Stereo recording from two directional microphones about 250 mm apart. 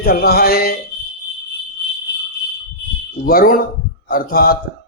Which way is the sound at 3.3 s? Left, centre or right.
Left.